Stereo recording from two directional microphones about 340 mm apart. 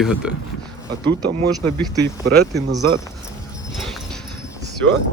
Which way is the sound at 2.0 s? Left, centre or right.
Right.